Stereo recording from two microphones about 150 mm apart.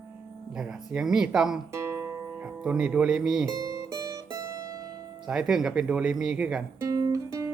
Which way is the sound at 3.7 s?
20° right (ahead or behind).